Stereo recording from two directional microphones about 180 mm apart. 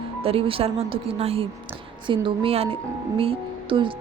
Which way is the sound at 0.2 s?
30° right (ahead or behind).